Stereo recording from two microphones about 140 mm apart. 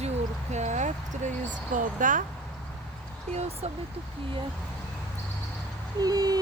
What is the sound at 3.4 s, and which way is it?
Speech, 50° right (ahead or behind).